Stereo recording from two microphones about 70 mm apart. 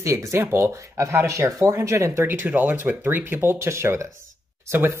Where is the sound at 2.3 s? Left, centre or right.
Right.